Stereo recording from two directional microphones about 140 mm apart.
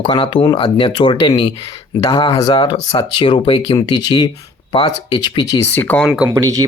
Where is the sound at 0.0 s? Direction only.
35° left (ahead or behind).